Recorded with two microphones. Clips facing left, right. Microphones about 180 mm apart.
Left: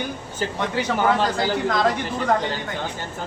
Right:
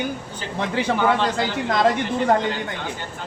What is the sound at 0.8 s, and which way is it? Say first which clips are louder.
A man's voice: right 1 dB; 30° right (ahead or behind).